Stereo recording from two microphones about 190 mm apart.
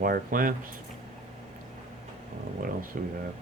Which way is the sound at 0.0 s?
50° right (ahead or behind).